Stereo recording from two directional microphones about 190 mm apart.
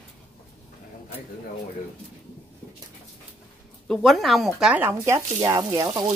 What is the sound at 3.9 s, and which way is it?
Speech, centre (ahead or behind).